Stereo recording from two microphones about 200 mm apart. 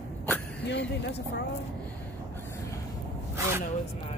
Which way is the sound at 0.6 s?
60° left (ahead or behind).